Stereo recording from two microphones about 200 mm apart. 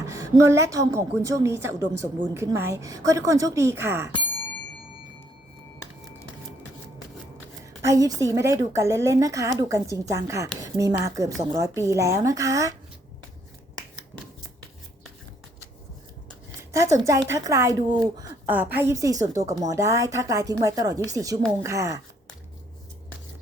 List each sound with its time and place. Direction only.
0.0 s a woman's voice: 15° right (ahead or behind)
7.9 s a woman's voice: 15° right (ahead or behind)
16.6 s a sound: 15° right (ahead or behind)
17.1 s a woman's voice: 15° right (ahead or behind)